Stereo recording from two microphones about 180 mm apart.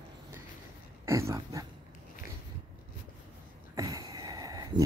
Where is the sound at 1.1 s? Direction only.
15° right (ahead or behind).